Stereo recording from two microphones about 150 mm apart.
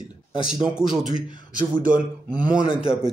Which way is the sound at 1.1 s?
60° right (ahead or behind).